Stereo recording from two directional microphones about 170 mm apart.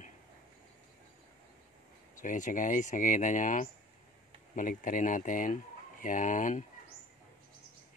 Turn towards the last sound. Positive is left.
turn(degrees=50)  # may be behind; listen again after turning